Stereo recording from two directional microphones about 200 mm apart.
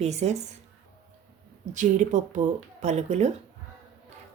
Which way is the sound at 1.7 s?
40° right (ahead or behind).